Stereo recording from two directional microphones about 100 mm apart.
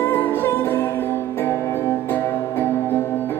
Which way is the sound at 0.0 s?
20° left (ahead or behind).